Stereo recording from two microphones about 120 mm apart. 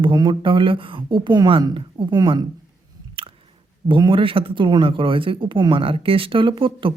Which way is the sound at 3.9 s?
45° right (ahead or behind).